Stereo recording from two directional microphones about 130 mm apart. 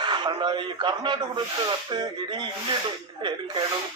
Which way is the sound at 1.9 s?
35° right (ahead or behind).